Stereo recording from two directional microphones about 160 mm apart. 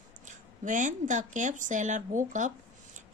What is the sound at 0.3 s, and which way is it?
A woman's voice, 55° right (ahead or behind).